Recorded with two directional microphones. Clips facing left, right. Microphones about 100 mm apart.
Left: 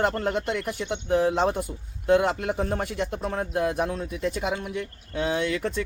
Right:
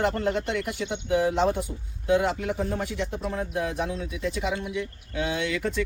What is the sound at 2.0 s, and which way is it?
Speech, 55° left (ahead or behind).